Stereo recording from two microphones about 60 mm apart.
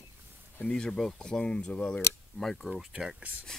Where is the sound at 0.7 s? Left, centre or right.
Centre.